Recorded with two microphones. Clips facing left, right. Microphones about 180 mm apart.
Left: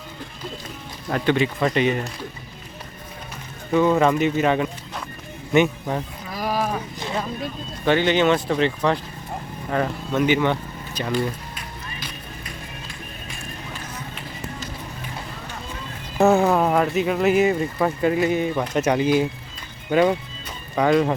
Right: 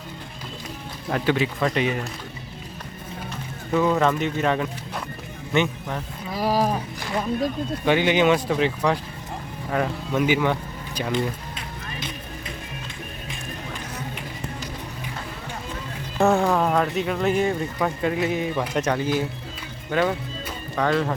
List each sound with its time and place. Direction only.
1.1 s speech: 5° right (ahead or behind)
3.7 s speech: 5° left (ahead or behind)
6.3 s a sound: 35° right (ahead or behind)
7.9 s speech: 10° right (ahead or behind)
11.1 s music: 25° right (ahead or behind)
16.2 s speech: 5° left (ahead or behind)
18.9 s speech: 15° left (ahead or behind)